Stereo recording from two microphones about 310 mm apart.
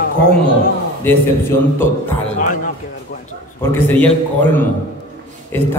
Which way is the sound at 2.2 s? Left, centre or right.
Left.